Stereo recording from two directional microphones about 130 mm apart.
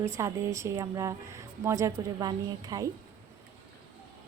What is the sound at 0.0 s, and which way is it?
Speech, 20° right (ahead or behind).